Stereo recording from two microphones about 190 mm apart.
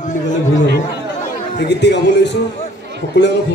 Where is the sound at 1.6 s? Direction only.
65° left (ahead or behind).